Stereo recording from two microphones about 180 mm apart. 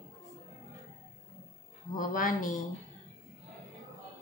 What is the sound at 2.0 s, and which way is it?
Speech, 50° left (ahead or behind).